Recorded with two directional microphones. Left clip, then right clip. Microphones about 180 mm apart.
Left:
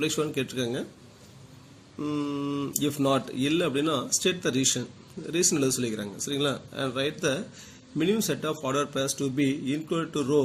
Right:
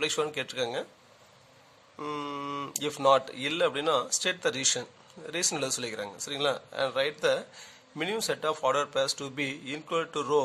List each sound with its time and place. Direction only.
0.0 s speech: 60° right (ahead or behind)
2.0 s speech: 55° right (ahead or behind)